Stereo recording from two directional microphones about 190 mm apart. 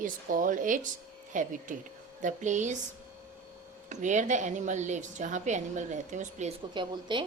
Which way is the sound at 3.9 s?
40° right (ahead or behind).